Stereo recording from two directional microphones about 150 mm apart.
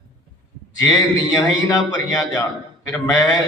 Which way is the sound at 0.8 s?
25° left (ahead or behind).